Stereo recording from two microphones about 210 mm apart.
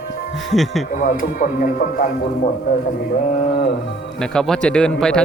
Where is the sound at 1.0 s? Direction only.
40° left (ahead or behind).